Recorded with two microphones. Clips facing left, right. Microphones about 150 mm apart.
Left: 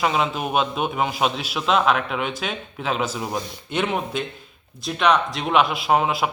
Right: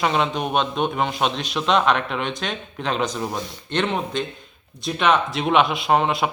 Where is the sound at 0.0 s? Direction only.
5° left (ahead or behind).